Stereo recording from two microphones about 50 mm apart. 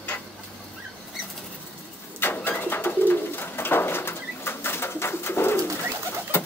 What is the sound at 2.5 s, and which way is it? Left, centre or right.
Bird, left.